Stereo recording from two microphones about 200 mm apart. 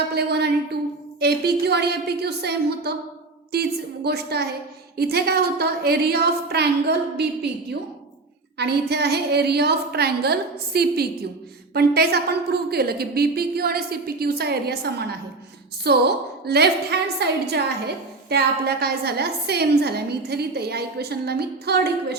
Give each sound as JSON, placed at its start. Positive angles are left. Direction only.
{"t": 0.1, "sound": "a woman's voice", "side_deg": -55}